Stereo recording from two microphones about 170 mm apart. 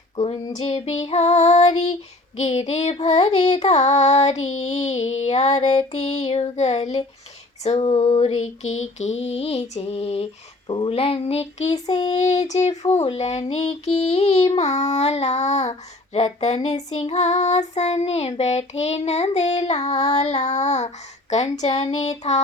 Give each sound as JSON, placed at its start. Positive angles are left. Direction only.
{"t": 0.2, "sound": "female singing", "side_deg": 35}
{"t": 2.4, "sound": "child singing", "side_deg": 35}
{"t": 11.9, "sound": "child singing", "side_deg": 25}
{"t": 12.1, "sound": "child singing", "side_deg": 40}